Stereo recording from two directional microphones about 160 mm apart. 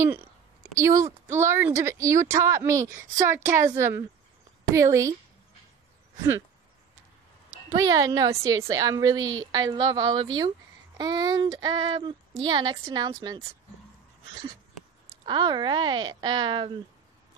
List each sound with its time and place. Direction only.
0.7 s a woman's voice: 20° right (ahead or behind)
7.7 s a woman's voice: 20° right (ahead or behind)
15.2 s a woman's voice: 25° right (ahead or behind)